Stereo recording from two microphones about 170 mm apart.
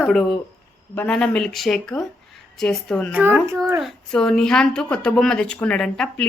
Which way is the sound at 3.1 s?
10° right (ahead or behind).